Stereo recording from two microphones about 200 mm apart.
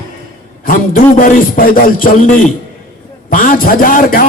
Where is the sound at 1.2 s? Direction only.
45° left (ahead or behind).